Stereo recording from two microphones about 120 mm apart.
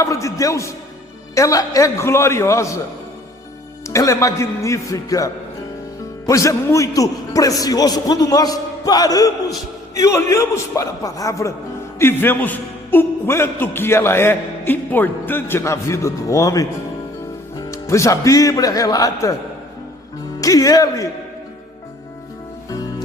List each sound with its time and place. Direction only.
0.0 s a man's voice: 25° left (ahead or behind)
3.8 s a man's voice: 25° left (ahead or behind)
20.4 s a man's voice: 30° left (ahead or behind)